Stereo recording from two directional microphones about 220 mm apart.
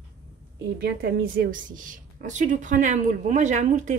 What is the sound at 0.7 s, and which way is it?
A woman's voice, 45° right (ahead or behind).